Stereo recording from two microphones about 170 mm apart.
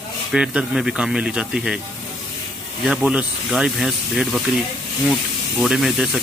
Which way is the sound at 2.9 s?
5° right (ahead or behind).